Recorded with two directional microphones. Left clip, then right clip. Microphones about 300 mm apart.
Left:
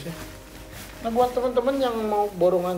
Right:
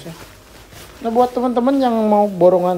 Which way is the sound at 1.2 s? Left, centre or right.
Centre.